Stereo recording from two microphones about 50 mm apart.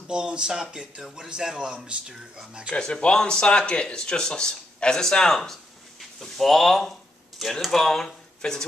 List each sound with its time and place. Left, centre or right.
0.1 s speech: centre
2.7 s a woman's voice: left